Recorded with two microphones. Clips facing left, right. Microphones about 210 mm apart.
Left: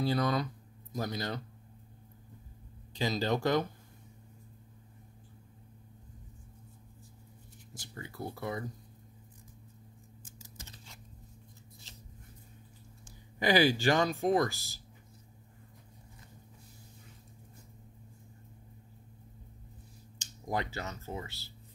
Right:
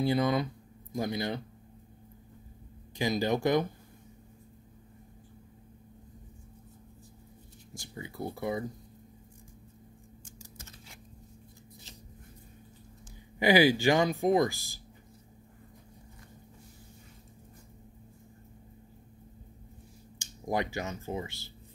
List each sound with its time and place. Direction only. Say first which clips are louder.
0.0 s speech: right 3 dB; 20° right (ahead or behind)
2.9 s speech: right 3 dB; 15° right (ahead or behind)
7.8 s speech: right 3 dB; 15° right (ahead or behind)
13.4 s speech: right 3 dB; 15° right (ahead or behind)
20.2 s speech: right 4 dB; 15° right (ahead or behind)